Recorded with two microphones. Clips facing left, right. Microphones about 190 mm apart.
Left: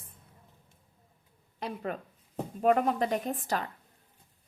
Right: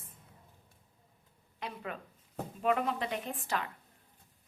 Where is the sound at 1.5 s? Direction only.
40° left (ahead or behind).